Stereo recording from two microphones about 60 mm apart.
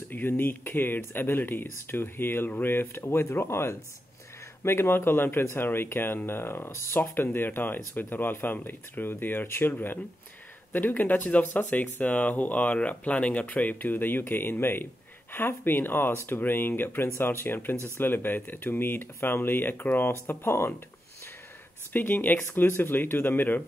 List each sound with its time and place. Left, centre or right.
0.1 s speech: left
21.9 s speech: left